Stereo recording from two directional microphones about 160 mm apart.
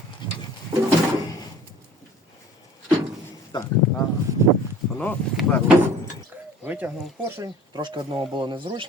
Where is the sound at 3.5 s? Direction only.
30° left (ahead or behind).